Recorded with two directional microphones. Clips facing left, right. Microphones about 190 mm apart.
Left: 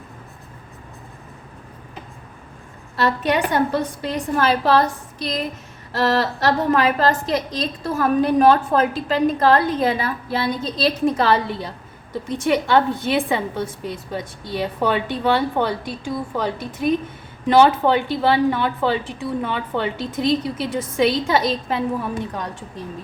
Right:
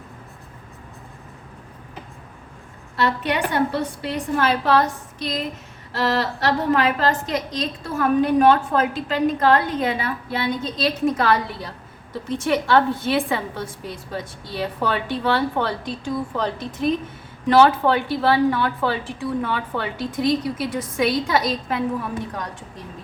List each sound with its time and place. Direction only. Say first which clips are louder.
2.9 s a woman's voice: left 3 dB; 40° left (ahead or behind)